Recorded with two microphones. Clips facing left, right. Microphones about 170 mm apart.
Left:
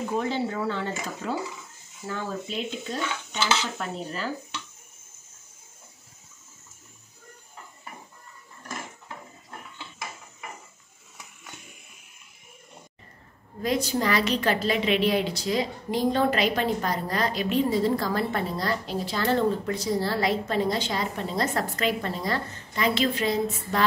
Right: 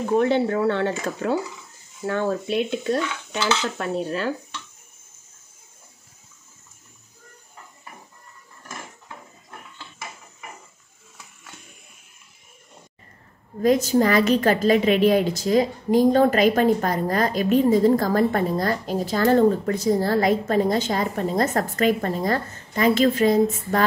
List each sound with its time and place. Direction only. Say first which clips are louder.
0.1 s dishes: right 10 dB; 65° right (ahead or behind)
13.6 s a woman's voice: right 8 dB; 45° right (ahead or behind)